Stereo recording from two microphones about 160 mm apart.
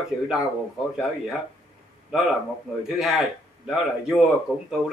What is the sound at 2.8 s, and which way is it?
A man's voice, centre (ahead or behind).